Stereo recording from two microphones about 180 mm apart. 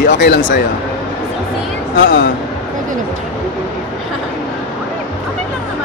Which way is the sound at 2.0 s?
90° left.